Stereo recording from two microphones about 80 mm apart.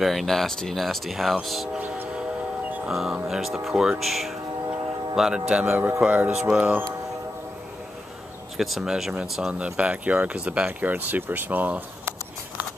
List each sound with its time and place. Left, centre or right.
0.0 s speech: centre
2.9 s speech: centre
8.5 s speech: centre; by 11.8 s right